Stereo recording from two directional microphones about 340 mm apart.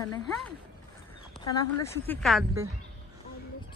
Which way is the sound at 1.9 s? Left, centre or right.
Centre.